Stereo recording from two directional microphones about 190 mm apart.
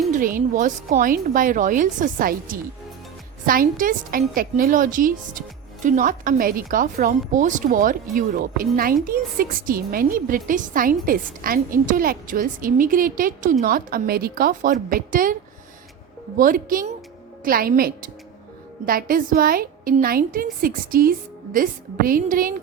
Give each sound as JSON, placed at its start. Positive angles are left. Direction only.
{"t": 0.1, "sound": "a woman's voice", "side_deg": -45}
{"t": 16.4, "sound": "a woman's voice", "side_deg": -45}